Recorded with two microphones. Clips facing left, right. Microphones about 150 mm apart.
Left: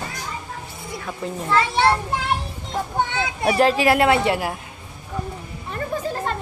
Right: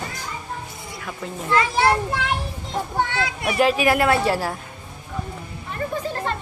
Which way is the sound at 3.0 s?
20° left (ahead or behind).